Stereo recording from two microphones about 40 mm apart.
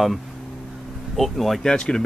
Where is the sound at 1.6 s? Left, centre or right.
Left.